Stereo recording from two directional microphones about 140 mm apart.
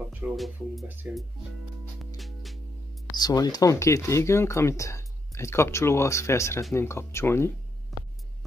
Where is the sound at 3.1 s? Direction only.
30° left (ahead or behind).